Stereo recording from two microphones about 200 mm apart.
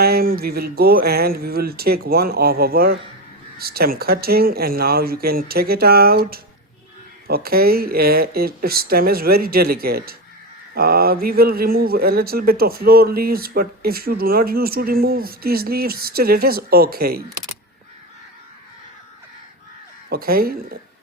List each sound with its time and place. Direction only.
0.0 s speech: 50° right (ahead or behind)
20.1 s speech: 50° right (ahead or behind)